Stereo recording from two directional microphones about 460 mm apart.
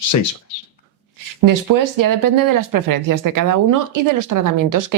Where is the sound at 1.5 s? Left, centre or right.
Right.